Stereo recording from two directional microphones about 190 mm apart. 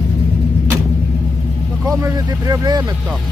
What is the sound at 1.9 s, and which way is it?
Vehicle, 15° right (ahead or behind).